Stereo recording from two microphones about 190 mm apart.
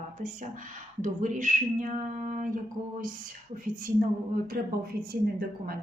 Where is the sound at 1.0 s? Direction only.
40° right (ahead or behind).